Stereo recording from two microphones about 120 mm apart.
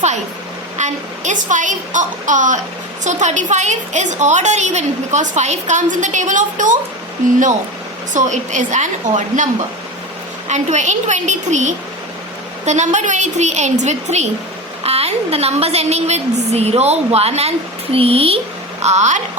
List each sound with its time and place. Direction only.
0.8 s a woman's voice: 80° right
8.1 s a woman's voice: 90° right
10.5 s a woman's voice: 75° right (ahead or behind)
14.8 s a woman's voice: 60° right (ahead or behind)
18.8 s speech: 70° right (ahead or behind)